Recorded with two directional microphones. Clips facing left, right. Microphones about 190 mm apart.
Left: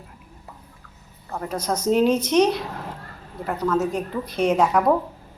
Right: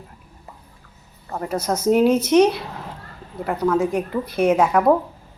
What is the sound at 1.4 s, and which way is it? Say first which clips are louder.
A woman's voice: right 3 dB; 10° right (ahead or behind).